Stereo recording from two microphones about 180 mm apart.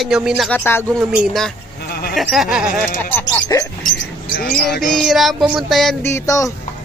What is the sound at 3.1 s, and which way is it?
Speech, 20° left (ahead or behind).